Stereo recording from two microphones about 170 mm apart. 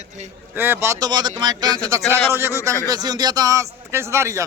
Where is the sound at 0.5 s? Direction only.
10° right (ahead or behind).